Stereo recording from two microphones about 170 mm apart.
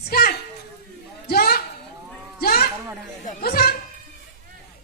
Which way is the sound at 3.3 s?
55° left (ahead or behind).